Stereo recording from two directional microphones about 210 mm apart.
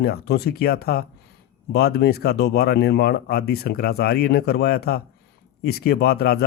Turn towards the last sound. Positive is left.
turn(degrees=50)  # may be behind; listen again after turning